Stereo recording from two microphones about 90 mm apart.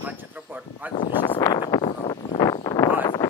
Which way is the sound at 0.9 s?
65° left (ahead or behind).